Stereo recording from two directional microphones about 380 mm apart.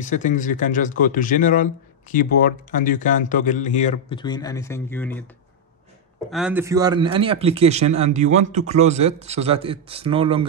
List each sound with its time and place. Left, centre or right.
0.0 s speech: centre
6.3 s a man's voice: centre